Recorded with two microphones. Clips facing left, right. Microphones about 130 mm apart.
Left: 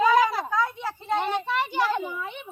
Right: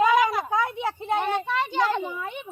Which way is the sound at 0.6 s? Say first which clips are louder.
Right 3 dB; 60° right (ahead or behind).